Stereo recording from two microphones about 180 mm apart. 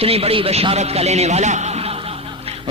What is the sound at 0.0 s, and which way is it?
A man's voice, 35° right (ahead or behind).